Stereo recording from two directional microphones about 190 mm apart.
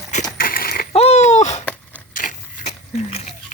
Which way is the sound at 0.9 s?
35° left (ahead or behind).